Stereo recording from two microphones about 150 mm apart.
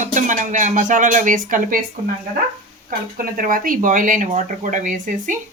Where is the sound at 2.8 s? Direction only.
70° right (ahead or behind).